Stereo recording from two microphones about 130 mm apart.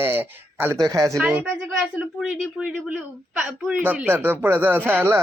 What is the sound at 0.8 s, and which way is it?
Speech, 25° right (ahead or behind).